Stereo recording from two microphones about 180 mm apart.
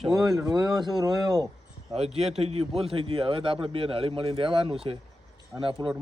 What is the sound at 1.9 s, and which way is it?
A man's voice, 35° right (ahead or behind).